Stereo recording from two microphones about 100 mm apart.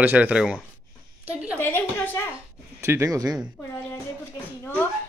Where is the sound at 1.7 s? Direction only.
20° left (ahead or behind).